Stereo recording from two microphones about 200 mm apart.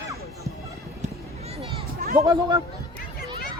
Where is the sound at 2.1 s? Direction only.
15° right (ahead or behind).